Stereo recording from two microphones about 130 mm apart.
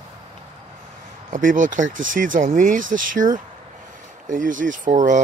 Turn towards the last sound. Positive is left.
turn(degrees=-80)